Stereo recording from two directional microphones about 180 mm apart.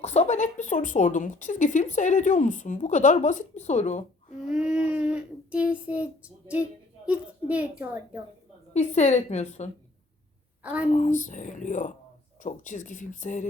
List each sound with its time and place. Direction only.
0.0 s a woman's voice: 40° left (ahead or behind)
4.4 s speech: 5° right (ahead or behind)
8.7 s a woman's voice: 40° left (ahead or behind)
10.6 s a woman's voice: 10° right (ahead or behind)
10.9 s a woman's voice: 40° left (ahead or behind)